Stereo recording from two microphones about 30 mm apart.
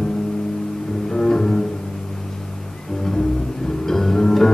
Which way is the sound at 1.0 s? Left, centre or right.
Centre.